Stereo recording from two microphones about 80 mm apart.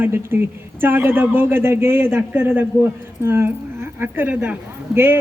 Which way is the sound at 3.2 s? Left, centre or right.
Right.